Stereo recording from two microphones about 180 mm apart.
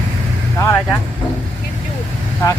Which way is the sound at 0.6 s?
15° left (ahead or behind).